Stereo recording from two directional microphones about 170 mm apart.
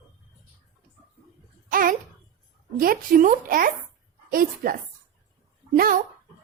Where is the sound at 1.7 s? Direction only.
55° right (ahead or behind).